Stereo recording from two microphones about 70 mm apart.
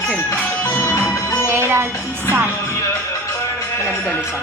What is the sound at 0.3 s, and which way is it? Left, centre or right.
Music, left.